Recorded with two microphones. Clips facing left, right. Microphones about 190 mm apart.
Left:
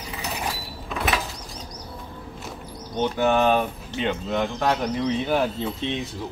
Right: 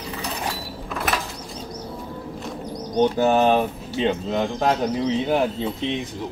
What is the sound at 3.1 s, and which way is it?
Speech, 30° right (ahead or behind).